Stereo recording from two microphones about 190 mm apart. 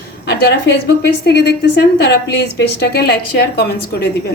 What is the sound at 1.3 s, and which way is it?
Speech, 60° left (ahead or behind).